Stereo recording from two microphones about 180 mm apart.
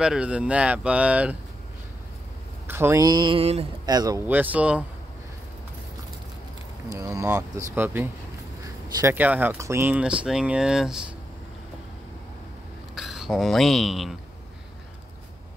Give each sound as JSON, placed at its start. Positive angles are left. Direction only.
{"t": 0.0, "sound": "speech", "side_deg": -5}
{"t": 2.6, "sound": "mantra", "side_deg": -15}
{"t": 3.8, "sound": "mantra", "side_deg": -20}
{"t": 4.3, "sound": "speech", "side_deg": -10}
{"t": 6.9, "sound": "speech", "side_deg": -20}
{"t": 12.9, "sound": "speech", "side_deg": 0}